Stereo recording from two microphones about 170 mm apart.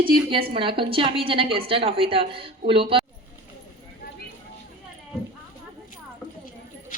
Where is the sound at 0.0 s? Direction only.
30° right (ahead or behind).